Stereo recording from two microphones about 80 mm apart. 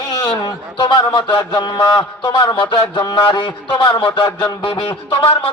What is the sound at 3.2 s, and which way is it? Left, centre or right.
Speech, left.